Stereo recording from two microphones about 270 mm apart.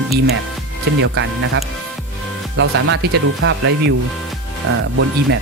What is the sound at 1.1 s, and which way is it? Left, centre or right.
Speech, right.